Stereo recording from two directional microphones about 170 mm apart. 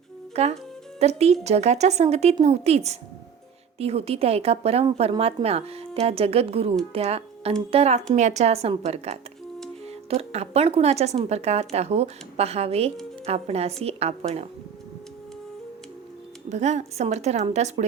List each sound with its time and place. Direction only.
0.4 s a woman's voice: 35° right (ahead or behind)
16.5 s a woman's voice: 40° right (ahead or behind)